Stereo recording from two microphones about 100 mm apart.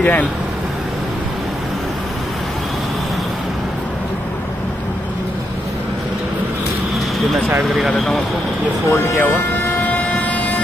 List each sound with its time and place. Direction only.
0.0 s speech: 15° left (ahead or behind)
8.9 s speech: 20° left (ahead or behind)
9.9 s vehicle: 15° left (ahead or behind)